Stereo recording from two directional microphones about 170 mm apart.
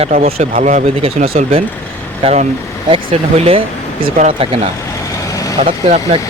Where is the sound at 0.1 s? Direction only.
60° right (ahead or behind); by 3.6 s 30° right (ahead or behind).